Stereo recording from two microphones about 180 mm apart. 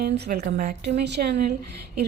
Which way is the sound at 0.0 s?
60° right (ahead or behind).